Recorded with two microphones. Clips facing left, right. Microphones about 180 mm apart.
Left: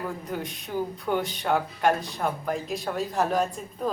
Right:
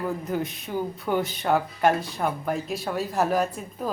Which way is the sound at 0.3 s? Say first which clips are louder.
Right 3 dB; 5° right (ahead or behind).